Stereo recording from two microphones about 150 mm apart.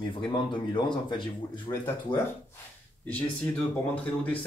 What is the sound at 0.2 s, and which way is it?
Speech, 30° left (ahead or behind).